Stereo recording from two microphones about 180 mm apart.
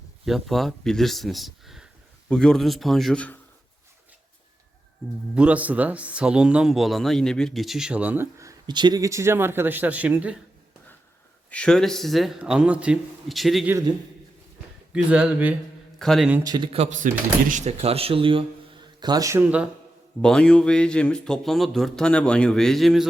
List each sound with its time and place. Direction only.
0.3 s speech: centre (ahead or behind)
5.3 s speech: 5° right (ahead or behind)
11.5 s speech: 5° left (ahead or behind)
13.7 s speech: 15° right (ahead or behind)
14.9 s a man's voice: 5° right (ahead or behind)
16.4 s speech: 20° right (ahead or behind)
16.7 s speech: 40° right (ahead or behind); by 19.6 s 10° right (ahead or behind)
20.2 s speech: 5° left (ahead or behind)